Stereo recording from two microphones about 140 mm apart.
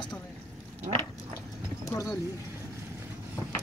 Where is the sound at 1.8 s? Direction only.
25° left (ahead or behind).